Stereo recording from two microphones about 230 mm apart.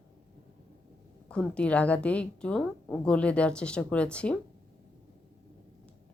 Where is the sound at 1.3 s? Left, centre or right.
Centre.